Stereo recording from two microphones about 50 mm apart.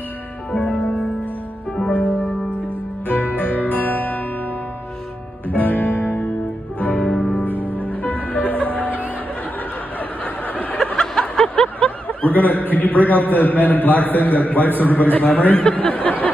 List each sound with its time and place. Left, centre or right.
0.5 s music: left
1.9 s music: left
5.5 s music: left
7.1 s music: centre
7.4 s music: right
7.9 s music: left
10.2 s snicker: left
10.8 s a sound: centre
11.4 s a man's voice: left
15.7 s a sound: left